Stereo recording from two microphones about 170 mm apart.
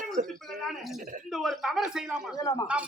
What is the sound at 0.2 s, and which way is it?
Speech, 45° right (ahead or behind).